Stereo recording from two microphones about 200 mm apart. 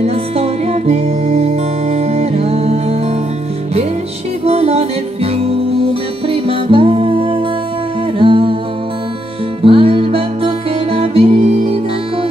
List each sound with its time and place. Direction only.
0.0 s music: 30° right (ahead or behind)
4.5 s music: 30° right (ahead or behind)
9.6 s music: 25° right (ahead or behind)